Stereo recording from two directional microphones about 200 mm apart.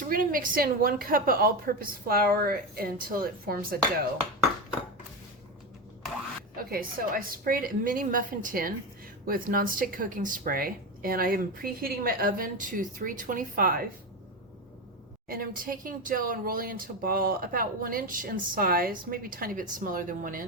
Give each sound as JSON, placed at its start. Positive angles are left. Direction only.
{"t": 0.1, "sound": "speech", "side_deg": -45}
{"t": 6.6, "sound": "speech", "side_deg": -45}
{"t": 15.3, "sound": "speech", "side_deg": -45}